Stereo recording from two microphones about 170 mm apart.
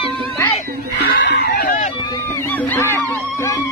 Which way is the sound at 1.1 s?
65° left (ahead or behind).